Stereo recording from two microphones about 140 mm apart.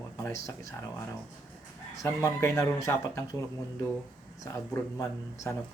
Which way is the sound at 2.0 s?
20° left (ahead or behind).